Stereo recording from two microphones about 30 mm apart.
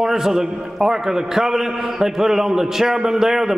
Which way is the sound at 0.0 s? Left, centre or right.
Centre.